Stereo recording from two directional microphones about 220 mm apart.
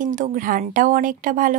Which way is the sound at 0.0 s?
35° right (ahead or behind).